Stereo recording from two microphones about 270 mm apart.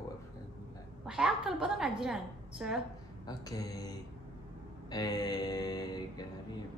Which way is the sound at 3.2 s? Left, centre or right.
Centre.